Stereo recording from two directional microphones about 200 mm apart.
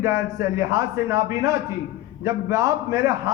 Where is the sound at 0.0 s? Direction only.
15° right (ahead or behind).